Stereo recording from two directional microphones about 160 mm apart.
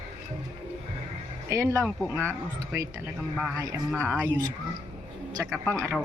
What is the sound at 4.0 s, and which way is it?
Speech, 15° right (ahead or behind).